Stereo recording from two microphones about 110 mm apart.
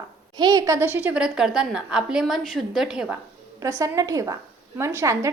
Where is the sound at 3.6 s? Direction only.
30° right (ahead or behind).